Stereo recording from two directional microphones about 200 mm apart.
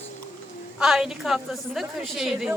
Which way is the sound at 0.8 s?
5° right (ahead or behind).